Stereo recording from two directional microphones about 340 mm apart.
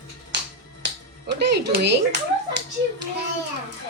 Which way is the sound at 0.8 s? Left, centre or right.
Right.